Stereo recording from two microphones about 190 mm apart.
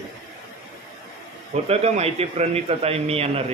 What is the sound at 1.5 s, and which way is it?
Speech, 35° right (ahead or behind).